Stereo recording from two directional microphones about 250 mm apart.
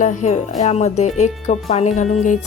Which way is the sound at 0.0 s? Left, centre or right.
Left.